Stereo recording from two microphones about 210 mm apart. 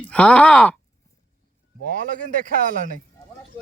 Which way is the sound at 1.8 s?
40° right (ahead or behind).